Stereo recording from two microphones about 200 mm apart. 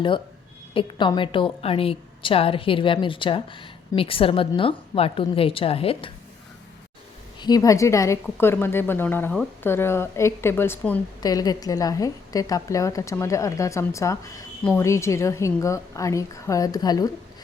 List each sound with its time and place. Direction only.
0.7 s a woman's voice: 25° left (ahead or behind)
7.3 s a woman's voice: 20° left (ahead or behind)